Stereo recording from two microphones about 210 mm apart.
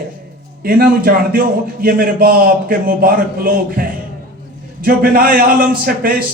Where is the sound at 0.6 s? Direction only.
45° right (ahead or behind).